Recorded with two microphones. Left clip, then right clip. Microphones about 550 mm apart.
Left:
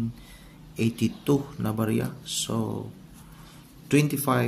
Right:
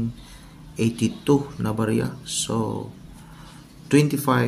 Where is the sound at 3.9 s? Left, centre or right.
Left.